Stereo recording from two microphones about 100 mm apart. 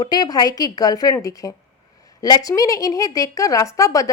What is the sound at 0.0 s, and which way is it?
A woman's voice, 40° left (ahead or behind).